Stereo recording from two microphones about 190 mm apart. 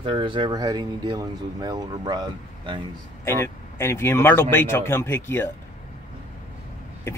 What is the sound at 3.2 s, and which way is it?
A man's voice, 15° left (ahead or behind).